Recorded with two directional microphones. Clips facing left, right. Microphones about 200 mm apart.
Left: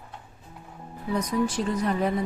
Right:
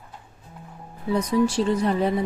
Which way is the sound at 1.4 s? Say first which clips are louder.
Right 4 dB; 30° right (ahead or behind).